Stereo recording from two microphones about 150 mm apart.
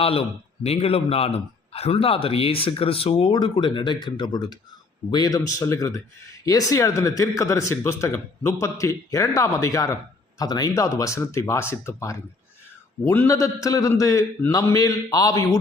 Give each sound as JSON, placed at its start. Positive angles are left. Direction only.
{"t": 0.0, "sound": "a man's voice", "side_deg": 40}